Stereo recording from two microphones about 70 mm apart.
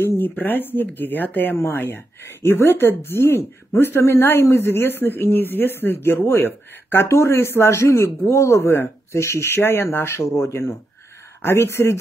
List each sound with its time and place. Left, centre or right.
0.0 s speech: left